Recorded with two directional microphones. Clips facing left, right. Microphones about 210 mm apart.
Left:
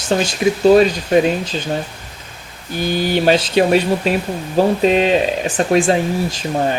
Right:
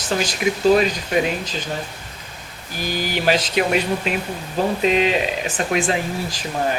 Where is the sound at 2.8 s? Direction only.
25° left (ahead or behind).